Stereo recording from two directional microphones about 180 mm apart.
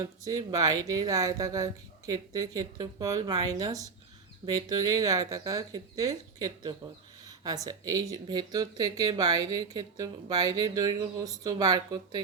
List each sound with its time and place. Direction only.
0.2 s speech: 20° right (ahead or behind)